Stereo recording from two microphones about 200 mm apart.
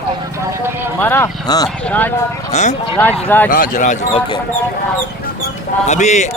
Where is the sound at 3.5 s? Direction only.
40° left (ahead or behind).